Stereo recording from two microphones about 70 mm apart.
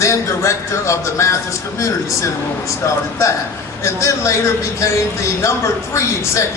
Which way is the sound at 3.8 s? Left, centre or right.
Left.